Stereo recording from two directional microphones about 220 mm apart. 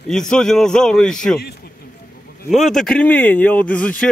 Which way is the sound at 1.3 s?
45° left (ahead or behind).